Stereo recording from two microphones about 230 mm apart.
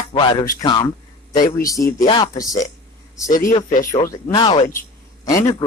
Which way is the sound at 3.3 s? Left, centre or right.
Left.